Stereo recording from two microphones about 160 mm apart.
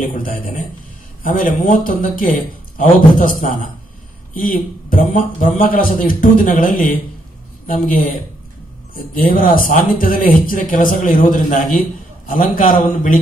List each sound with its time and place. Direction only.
0.0 s speech: 60° left (ahead or behind)